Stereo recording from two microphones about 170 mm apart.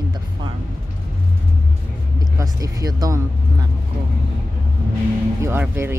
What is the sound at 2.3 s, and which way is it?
Speech, 20° right (ahead or behind).